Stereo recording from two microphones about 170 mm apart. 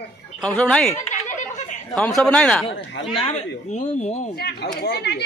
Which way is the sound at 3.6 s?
45° left (ahead or behind).